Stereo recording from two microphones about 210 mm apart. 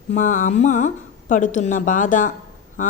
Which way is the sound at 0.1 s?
35° left (ahead or behind).